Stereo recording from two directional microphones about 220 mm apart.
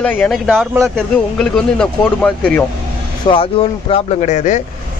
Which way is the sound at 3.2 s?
25° left (ahead or behind).